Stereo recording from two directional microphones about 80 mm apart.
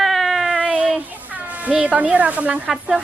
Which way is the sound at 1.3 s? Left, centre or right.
Centre.